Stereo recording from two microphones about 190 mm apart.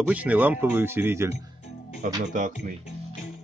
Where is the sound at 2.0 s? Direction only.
40° right (ahead or behind).